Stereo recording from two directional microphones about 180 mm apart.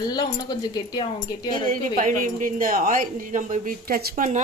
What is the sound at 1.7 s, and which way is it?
Speech, 45° right (ahead or behind).